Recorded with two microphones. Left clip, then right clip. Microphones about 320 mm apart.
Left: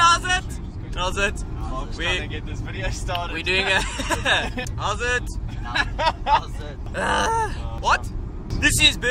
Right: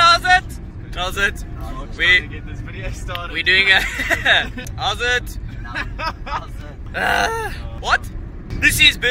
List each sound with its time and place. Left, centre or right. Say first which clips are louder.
0.0 s vehicle: right 5 dB; centre
2.0 s speech: right 11 dB; centre
3.3 s speech: right 8 dB; centre
5.8 s a sound: left 4 dB; left
6.9 s speech: right 3 dB; centre